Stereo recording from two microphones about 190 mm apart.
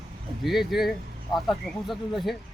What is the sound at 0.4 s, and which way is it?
Speech, centre (ahead or behind).